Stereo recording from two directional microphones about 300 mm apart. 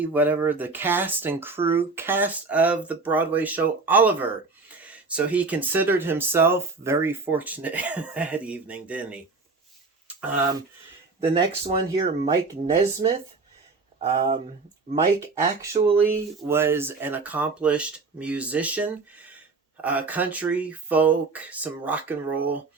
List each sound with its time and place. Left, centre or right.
0.0 s speech: centre
11.2 s speech: centre
15.6 s speech: centre